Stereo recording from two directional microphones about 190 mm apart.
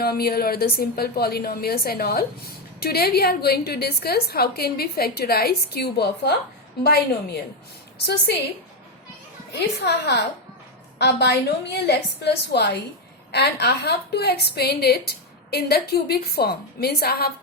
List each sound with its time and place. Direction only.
0.0 s a woman's voice: 55° left (ahead or behind)
9.5 s a woman's voice: 60° left (ahead or behind)